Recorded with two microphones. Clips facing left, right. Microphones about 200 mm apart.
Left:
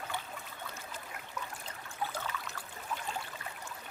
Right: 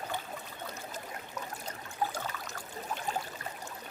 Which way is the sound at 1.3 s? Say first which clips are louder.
Right 2 dB; 40° right (ahead or behind).